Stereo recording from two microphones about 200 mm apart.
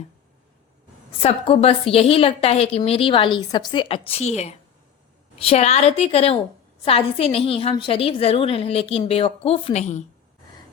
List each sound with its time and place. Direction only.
1.2 s a woman's voice: 30° left (ahead or behind)